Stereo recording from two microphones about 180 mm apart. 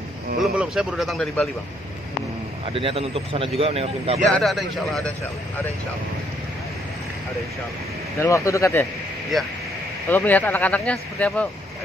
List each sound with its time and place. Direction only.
0.4 s speech: centre (ahead or behind)
2.6 s speech: 30° right (ahead or behind)
4.3 s speech: centre (ahead or behind)
8.2 s speech: 15° left (ahead or behind)
9.3 s speech: centre (ahead or behind)